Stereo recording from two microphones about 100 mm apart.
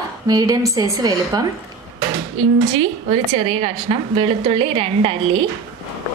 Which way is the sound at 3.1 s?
85° right.